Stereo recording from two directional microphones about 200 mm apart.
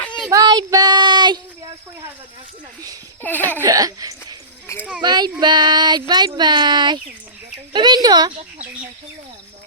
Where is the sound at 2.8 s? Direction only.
15° right (ahead or behind).